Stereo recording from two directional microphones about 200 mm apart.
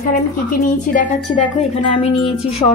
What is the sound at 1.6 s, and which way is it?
A woman's voice, 30° left (ahead or behind).